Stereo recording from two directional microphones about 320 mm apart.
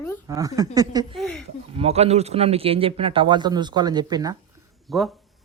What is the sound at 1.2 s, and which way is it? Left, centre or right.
Speech, centre.